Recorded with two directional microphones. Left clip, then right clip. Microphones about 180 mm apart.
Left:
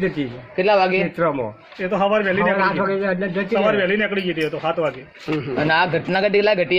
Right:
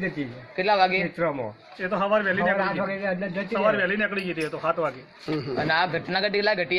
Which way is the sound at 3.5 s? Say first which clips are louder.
Left 4 dB; 20° left (ahead or behind).